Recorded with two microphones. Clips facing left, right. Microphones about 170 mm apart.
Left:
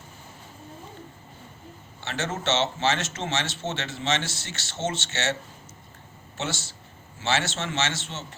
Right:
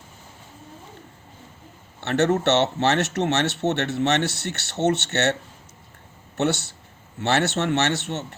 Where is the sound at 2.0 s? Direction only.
65° right (ahead or behind).